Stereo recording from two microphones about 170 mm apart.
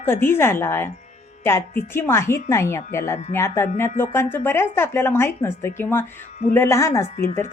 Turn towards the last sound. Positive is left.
turn(degrees=15)  # may be behind; listen again after turning